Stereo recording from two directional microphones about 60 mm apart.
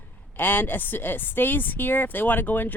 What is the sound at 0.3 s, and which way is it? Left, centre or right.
Speech, left.